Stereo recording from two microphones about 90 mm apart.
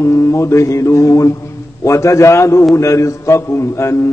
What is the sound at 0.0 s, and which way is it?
Mantra, 35° left (ahead or behind).